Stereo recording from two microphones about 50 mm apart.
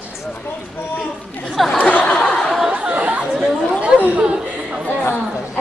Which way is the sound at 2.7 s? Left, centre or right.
Right.